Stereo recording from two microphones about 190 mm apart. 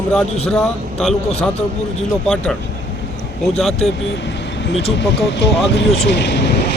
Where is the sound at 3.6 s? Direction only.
5° left (ahead or behind).